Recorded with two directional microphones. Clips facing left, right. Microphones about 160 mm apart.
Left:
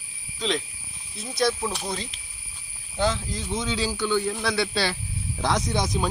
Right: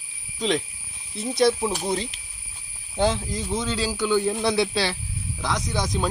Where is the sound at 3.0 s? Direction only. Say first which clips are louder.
Right 3 dB; 10° right (ahead or behind).